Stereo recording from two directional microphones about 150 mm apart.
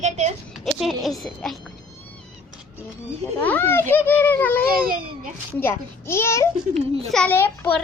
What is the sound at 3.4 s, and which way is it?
Speech, 10° left (ahead or behind).